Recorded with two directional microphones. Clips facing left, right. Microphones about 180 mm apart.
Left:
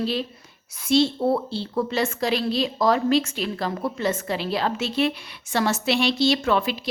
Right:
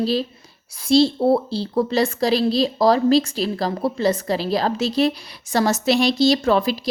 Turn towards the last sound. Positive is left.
turn(degrees=-35)  # may be behind; listen again after turning